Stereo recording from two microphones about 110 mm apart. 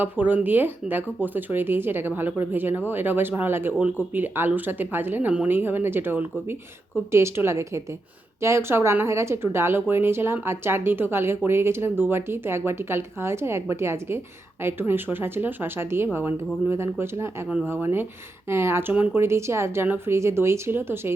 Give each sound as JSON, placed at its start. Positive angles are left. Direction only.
{"t": 0.0, "sound": "a woman's voice", "side_deg": -15}